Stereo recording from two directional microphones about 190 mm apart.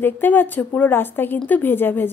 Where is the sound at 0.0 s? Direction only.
10° left (ahead or behind).